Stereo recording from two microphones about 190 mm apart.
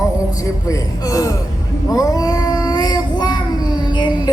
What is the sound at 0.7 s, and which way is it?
Speech, 15° left (ahead or behind).